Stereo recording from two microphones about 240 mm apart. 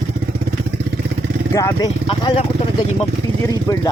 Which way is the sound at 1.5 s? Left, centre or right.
Centre.